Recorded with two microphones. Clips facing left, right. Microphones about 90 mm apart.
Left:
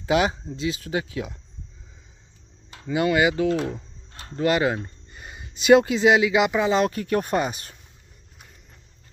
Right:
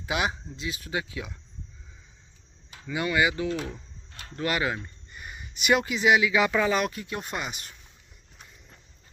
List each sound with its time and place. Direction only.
0.0 s speech: 35° left (ahead or behind)
2.9 s speech: 25° left (ahead or behind)
4.1 s a sound: 45° left (ahead or behind)
4.4 s speech: 25° left (ahead or behind)
6.8 s speech: 45° left (ahead or behind)